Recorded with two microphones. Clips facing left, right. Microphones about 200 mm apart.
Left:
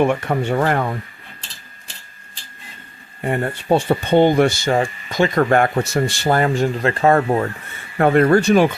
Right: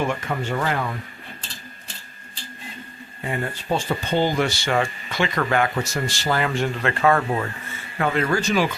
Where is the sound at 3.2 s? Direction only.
55° left (ahead or behind).